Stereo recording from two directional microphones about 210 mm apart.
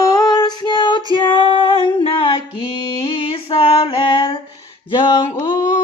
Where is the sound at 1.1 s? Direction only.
25° left (ahead or behind).